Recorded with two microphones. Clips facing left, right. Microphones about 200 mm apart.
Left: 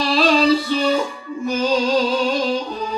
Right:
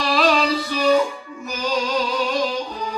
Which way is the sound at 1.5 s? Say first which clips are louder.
Left 5 dB; 30° left (ahead or behind).